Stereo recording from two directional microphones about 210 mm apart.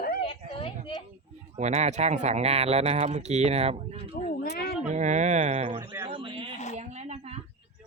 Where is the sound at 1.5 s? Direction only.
30° right (ahead or behind).